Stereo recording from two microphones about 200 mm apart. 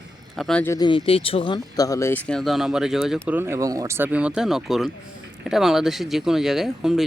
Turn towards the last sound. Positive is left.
turn(degrees=0)  # may be behind; listen again after turning